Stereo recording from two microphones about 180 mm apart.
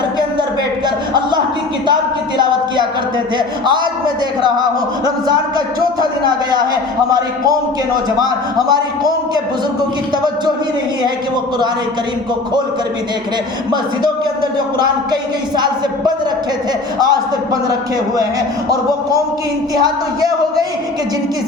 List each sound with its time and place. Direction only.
3.3 s speech: 25° right (ahead or behind)
8.2 s speech: 20° right (ahead or behind)
14.8 s speech: 25° right (ahead or behind)
19.8 s speech: 20° right (ahead or behind)